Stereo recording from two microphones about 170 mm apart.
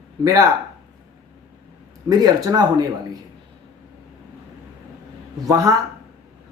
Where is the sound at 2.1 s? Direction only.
20° right (ahead or behind).